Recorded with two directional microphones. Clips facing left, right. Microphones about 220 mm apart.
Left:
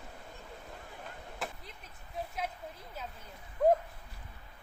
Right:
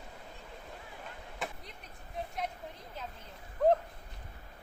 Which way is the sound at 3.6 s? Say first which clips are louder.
Even; 10° left (ahead or behind).